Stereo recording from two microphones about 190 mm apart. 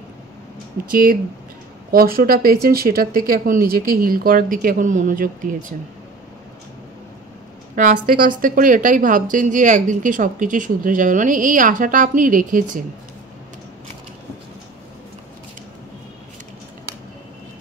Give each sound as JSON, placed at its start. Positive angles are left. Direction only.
{"t": 1.9, "sound": "a woman's voice", "side_deg": -50}
{"t": 7.7, "sound": "a woman's voice", "side_deg": -45}